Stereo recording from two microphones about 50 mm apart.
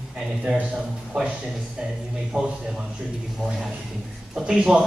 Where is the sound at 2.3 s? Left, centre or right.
Right.